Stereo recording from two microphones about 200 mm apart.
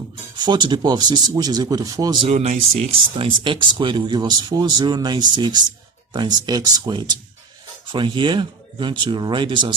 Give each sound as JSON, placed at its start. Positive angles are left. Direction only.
{"t": 0.3, "sound": "speech", "side_deg": -20}
{"t": 2.2, "sound": "speech", "side_deg": -30}